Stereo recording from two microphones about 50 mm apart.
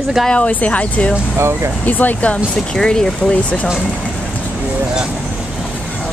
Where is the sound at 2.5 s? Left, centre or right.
Centre.